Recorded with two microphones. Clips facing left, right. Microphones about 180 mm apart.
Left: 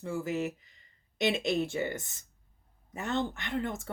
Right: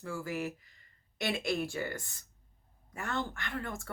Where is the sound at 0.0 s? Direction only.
20° left (ahead or behind).